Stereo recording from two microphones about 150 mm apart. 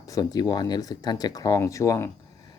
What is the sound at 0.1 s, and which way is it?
Speech, 25° left (ahead or behind).